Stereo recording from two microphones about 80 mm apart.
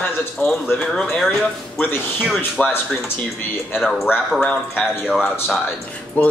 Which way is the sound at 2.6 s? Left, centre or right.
Left.